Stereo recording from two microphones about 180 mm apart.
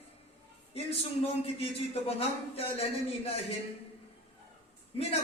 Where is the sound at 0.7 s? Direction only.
35° left (ahead or behind).